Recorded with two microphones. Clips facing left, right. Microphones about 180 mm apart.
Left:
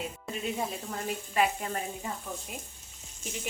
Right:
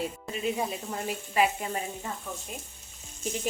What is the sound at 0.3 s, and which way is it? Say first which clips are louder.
Speech: right 2 dB; 5° right (ahead or behind).